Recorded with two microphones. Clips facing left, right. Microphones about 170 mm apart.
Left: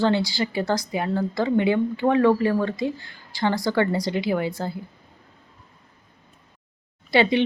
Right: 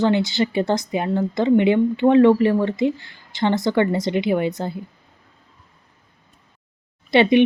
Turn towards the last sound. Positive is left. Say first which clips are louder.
# right 4 dB
turn(degrees=-20)  # may be behind; listen again after turning